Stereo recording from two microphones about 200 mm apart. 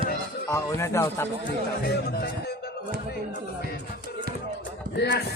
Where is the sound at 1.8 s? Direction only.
55° left (ahead or behind).